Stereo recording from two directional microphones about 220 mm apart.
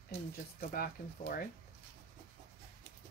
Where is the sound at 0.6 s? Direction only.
40° left (ahead or behind).